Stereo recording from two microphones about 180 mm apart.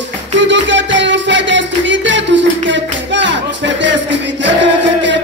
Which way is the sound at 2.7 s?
90° right.